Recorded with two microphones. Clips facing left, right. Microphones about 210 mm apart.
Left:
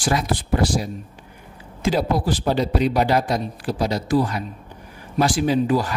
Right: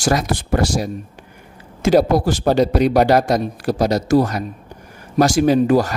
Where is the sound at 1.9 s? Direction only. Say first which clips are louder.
Right 8 dB; 45° right (ahead or behind).